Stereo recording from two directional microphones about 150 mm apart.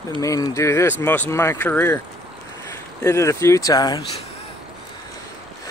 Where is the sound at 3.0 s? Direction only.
20° left (ahead or behind).